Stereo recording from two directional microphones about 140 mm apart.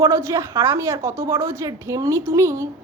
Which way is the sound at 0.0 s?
20° right (ahead or behind).